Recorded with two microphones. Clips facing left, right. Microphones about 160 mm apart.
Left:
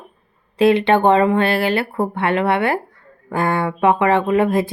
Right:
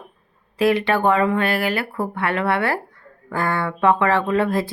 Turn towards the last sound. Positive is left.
turn(degrees=20)  # may be behind; listen again after turning